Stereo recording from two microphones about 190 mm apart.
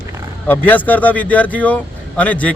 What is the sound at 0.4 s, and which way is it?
A man's voice, 10° left (ahead or behind).